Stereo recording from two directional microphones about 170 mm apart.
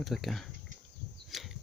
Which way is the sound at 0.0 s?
Centre (ahead or behind).